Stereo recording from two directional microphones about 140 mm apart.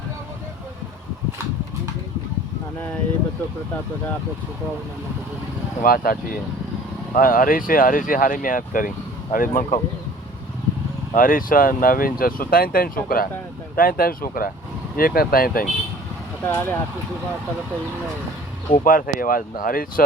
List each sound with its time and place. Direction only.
5.8 s speech: 90° left; by 9.8 s 60° left (ahead or behind)
11.1 s speech: 75° left (ahead or behind)
16.5 s speech: 15° left (ahead or behind)
18.9 s speech: 90° left